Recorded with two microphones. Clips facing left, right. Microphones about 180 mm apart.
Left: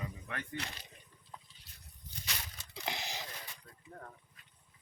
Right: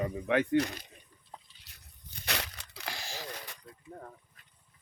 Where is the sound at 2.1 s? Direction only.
70° right (ahead or behind).